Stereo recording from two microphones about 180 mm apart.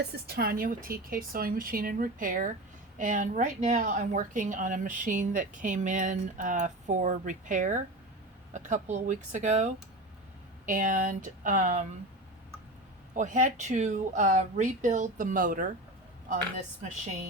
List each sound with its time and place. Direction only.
0.0 s a woman's voice: 65° right (ahead or behind); by 9.6 s 45° right (ahead or behind)
10.7 s a woman's voice: 50° right (ahead or behind)
13.1 s a woman's voice: 45° right (ahead or behind)